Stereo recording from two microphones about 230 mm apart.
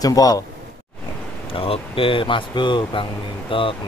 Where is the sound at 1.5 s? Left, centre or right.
Left.